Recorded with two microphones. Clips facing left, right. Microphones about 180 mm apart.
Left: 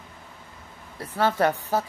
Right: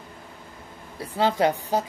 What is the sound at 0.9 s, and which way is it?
Speech, 15° right (ahead or behind).